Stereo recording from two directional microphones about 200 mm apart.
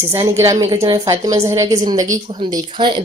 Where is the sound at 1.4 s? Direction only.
15° right (ahead or behind).